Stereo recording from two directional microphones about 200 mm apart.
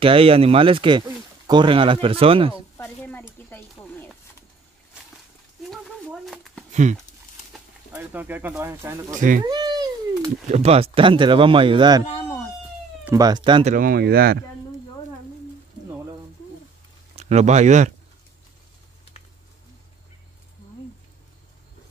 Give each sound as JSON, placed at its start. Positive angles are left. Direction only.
{"t": 0.0, "sound": "speech", "side_deg": -30}
{"t": 2.5, "sound": "a sound", "side_deg": 10}
{"t": 5.6, "sound": "a sound", "side_deg": 0}
{"t": 6.7, "sound": "a sound", "side_deg": -35}
{"t": 7.5, "sound": "speech", "side_deg": -10}
{"t": 9.1, "sound": "speech", "side_deg": -40}
{"t": 9.4, "sound": "cat", "side_deg": -20}
{"t": 10.4, "sound": "speech", "side_deg": -35}
{"t": 13.0, "sound": "speech", "side_deg": -15}
{"t": 13.7, "sound": "speech", "side_deg": -50}
{"t": 17.1, "sound": "speech", "side_deg": -35}